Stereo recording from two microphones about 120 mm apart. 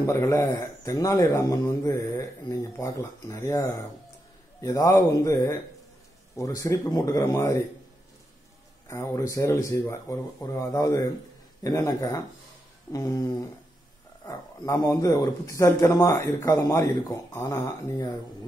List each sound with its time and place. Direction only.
0.0 s a man's voice: 25° left (ahead or behind)
8.8 s a man's voice: 25° left (ahead or behind)
14.2 s a man's voice: 25° left (ahead or behind)